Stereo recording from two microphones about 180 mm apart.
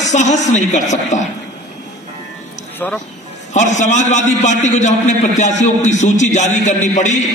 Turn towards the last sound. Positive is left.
turn(degrees=40)  # may be behind; listen again after turning